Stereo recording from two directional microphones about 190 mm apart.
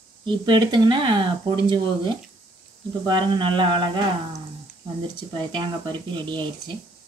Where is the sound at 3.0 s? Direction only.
25° right (ahead or behind).